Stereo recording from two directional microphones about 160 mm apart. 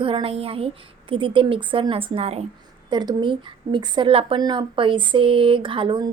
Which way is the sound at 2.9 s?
25° right (ahead or behind).